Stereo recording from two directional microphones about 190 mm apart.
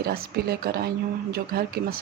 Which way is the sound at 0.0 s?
50° right (ahead or behind).